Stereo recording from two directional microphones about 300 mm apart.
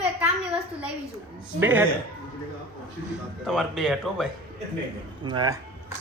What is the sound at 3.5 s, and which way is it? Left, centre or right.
Speech, centre.